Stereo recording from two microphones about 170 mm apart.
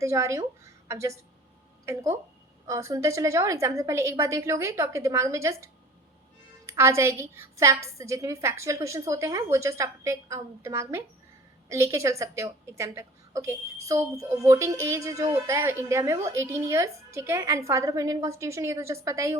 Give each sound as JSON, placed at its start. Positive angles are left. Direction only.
{"t": 0.0, "sound": "a woman's voice", "side_deg": -15}